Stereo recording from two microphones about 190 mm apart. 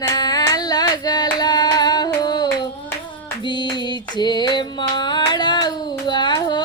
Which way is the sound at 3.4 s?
25° left (ahead or behind).